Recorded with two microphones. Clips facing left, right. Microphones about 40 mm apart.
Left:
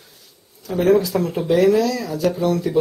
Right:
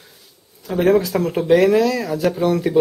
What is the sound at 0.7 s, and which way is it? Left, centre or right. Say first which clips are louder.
Speech: even; right.